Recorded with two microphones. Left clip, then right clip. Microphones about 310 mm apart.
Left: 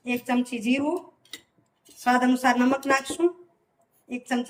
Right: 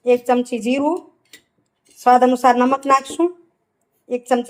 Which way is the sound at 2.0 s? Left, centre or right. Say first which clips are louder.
Right 9 dB; centre.